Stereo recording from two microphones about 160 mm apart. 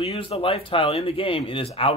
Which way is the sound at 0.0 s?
40° left (ahead or behind).